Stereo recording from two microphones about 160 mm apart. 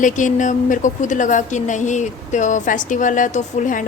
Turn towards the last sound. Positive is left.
turn(degrees=55)  # may be behind; listen again after turning